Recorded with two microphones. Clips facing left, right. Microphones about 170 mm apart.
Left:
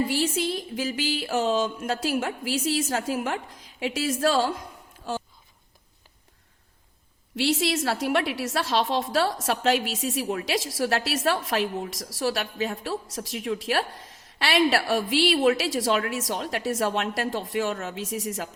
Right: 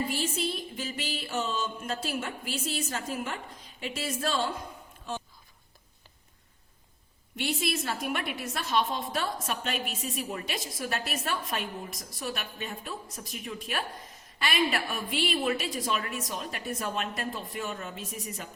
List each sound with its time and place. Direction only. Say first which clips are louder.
0.1 s a woman's voice: left 6 dB; 90° left
7.3 s a woman's voice: left 7 dB; 90° left